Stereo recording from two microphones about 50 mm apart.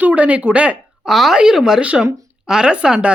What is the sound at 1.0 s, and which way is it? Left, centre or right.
A woman's voice, centre.